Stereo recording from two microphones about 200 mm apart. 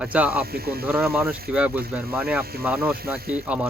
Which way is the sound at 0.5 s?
50° right (ahead or behind).